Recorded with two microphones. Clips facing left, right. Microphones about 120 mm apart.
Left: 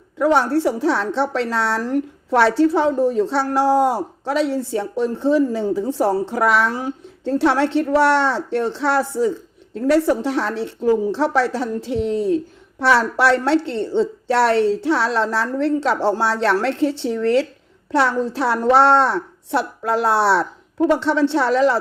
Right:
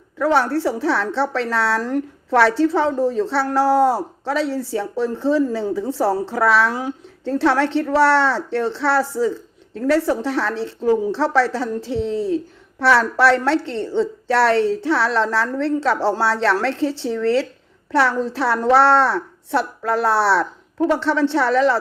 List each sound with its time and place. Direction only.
0.2 s a woman's voice: 15° left (ahead or behind)